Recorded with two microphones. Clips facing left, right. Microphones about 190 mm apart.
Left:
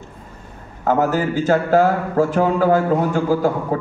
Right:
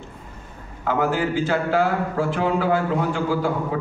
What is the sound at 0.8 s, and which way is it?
A man's voice, 45° left (ahead or behind).